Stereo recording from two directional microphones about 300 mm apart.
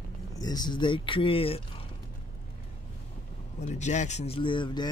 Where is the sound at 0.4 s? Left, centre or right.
Centre.